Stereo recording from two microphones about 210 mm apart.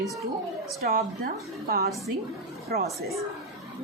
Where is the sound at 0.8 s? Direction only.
45° right (ahead or behind).